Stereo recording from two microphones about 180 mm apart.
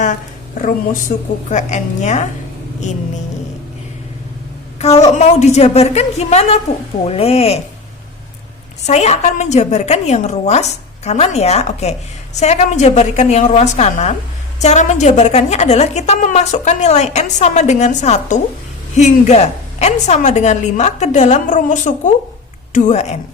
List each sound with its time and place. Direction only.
0.6 s a woman's voice: 45° left (ahead or behind)
4.8 s a woman's voice: 35° left (ahead or behind)
8.9 s a woman's voice: 40° left (ahead or behind)